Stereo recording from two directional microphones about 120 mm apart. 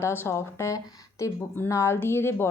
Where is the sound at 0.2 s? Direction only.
25° left (ahead or behind).